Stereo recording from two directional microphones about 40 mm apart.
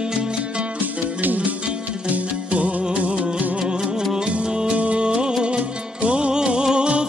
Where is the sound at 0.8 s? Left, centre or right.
Right.